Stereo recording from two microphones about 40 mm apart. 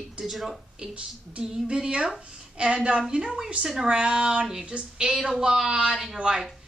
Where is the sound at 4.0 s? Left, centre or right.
Right; by 6.2 s centre.